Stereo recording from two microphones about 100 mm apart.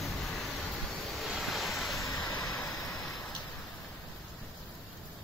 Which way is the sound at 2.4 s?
Centre (ahead or behind).